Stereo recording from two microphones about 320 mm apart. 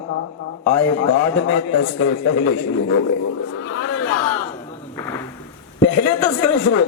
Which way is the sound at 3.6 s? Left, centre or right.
Left.